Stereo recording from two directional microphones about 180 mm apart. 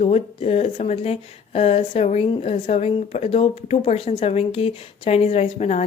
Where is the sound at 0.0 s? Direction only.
35° left (ahead or behind).